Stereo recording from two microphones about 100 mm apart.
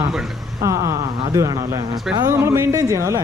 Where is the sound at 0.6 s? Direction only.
30° right (ahead or behind).